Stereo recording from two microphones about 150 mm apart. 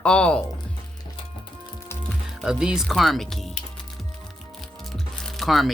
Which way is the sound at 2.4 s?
5° right (ahead or behind).